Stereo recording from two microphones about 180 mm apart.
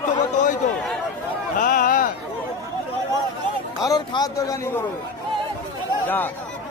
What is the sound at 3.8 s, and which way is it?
Speech, 25° left (ahead or behind).